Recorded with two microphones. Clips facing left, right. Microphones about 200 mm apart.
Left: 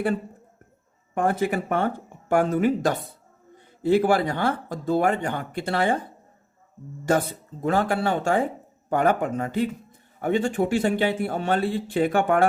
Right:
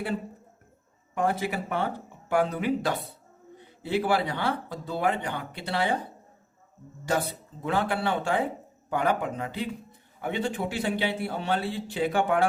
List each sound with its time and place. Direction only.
1.1 s a man's voice: 50° left (ahead or behind)
7.0 s a man's voice: 50° left (ahead or behind)